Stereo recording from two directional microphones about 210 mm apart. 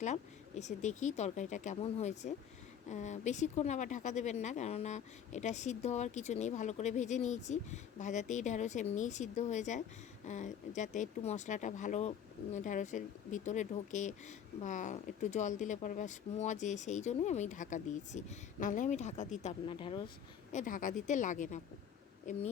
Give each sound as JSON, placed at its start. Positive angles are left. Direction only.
{"t": 0.0, "sound": "speech", "side_deg": 35}
{"t": 20.5, "sound": "speech", "side_deg": 40}